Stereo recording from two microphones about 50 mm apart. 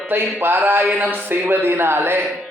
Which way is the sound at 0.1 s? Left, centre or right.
Right.